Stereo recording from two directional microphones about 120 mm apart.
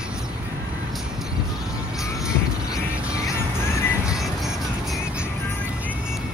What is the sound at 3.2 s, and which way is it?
Music, 25° left (ahead or behind).